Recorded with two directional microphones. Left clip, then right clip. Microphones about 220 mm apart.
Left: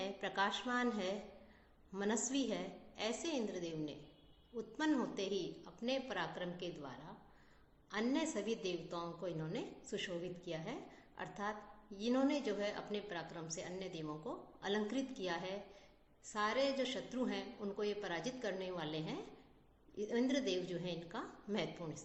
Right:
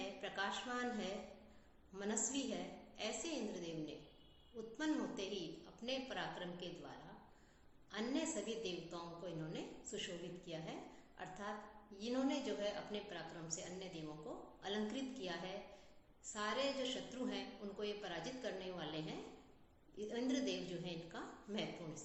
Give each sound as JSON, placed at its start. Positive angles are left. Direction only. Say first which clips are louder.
{"t": 0.2, "sound": "a woman's voice", "louder": "left 6 dB", "side_deg": 50}
{"t": 20.0, "sound": "a woman's voice", "louder": "left 4 dB", "side_deg": 50}